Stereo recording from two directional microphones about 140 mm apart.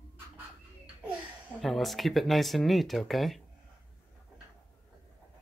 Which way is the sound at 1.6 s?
Centre (ahead or behind).